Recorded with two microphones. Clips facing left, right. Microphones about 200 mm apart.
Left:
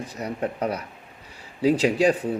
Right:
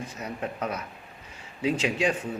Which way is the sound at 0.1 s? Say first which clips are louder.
Left 5 dB; 35° left (ahead or behind).